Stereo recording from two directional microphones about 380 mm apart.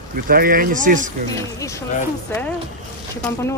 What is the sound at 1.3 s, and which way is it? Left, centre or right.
Speech, centre.